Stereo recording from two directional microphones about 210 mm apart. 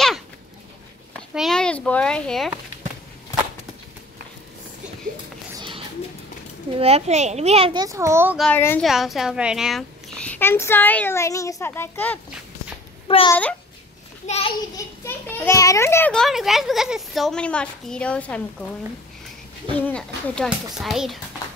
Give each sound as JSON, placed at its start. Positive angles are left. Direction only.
{"t": 1.3, "sound": "a child's voice", "side_deg": 0}
{"t": 6.8, "sound": "a child's voice", "side_deg": -30}
{"t": 8.4, "sound": "a woman's voice", "side_deg": 10}
{"t": 13.3, "sound": "a woman's voice", "side_deg": 5}
{"t": 14.2, "sound": "a child's voice", "side_deg": 30}
{"t": 15.0, "sound": "a child's voice", "side_deg": 10}
{"t": 19.8, "sound": "a child's voice", "side_deg": 5}